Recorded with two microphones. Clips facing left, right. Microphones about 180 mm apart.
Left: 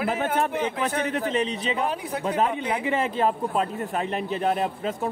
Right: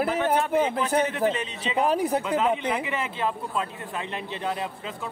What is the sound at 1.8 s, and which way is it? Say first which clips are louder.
Speech: right 5 dB; 40° right (ahead or behind).